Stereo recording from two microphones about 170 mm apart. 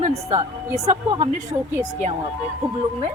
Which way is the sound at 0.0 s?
35° right (ahead or behind).